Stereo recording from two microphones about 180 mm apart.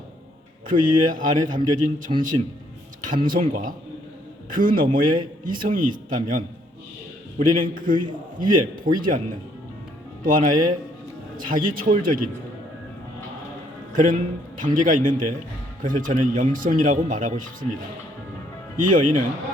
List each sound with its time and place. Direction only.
0.7 s speech: 50° right (ahead or behind)
10.2 s speech: 50° right (ahead or behind)
13.9 s a man's voice: 50° right (ahead or behind)
18.8 s speech: 45° right (ahead or behind)